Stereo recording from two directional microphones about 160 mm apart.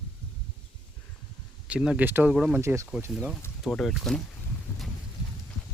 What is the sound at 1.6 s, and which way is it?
Speech, 5° right (ahead or behind).